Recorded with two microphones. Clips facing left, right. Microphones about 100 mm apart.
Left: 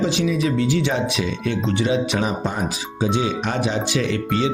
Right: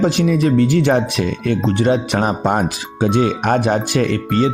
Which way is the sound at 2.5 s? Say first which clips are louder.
Right 7 dB; 60° right (ahead or behind).